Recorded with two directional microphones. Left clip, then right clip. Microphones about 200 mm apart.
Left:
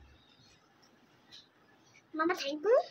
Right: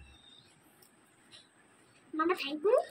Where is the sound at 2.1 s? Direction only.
20° left (ahead or behind).